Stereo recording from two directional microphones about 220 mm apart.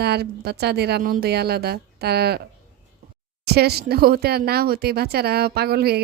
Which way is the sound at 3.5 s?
45° right (ahead or behind).